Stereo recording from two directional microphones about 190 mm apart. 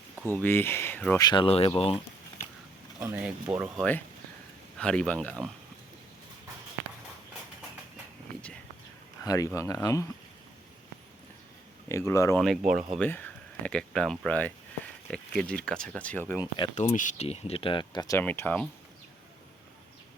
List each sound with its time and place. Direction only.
0.3 s speech: 10° left (ahead or behind)
1.2 s speech: 25° left (ahead or behind)
3.0 s speech: 10° right (ahead or behind)
3.8 s speech: 10° left (ahead or behind)
9.2 s speech: 20° left (ahead or behind)
11.9 s speech: 15° left (ahead or behind)
12.4 s speech: centre (ahead or behind)
16.7 s speech: 40° left (ahead or behind); by 18.7 s 10° left (ahead or behind)